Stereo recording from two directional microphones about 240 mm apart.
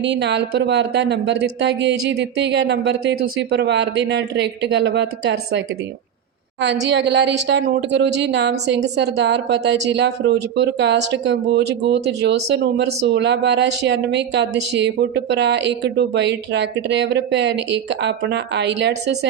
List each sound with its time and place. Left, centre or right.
0.0 s speech: right
6.8 s speech: right